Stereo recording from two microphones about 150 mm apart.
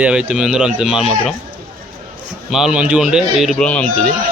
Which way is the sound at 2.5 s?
5° right (ahead or behind).